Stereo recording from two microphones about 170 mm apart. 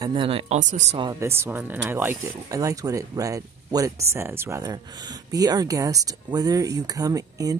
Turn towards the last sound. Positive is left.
turn(degrees=-20)  # may be behind; listen again after turning